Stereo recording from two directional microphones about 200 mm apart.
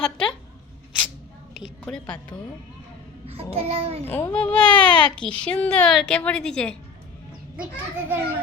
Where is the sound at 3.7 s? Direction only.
30° right (ahead or behind).